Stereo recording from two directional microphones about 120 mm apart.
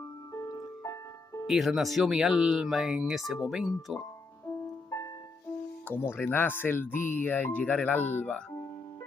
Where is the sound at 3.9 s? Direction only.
25° left (ahead or behind).